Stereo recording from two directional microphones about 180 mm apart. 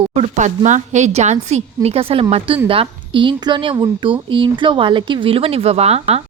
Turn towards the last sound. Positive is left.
turn(degrees=-35)  # may be behind; listen again after turning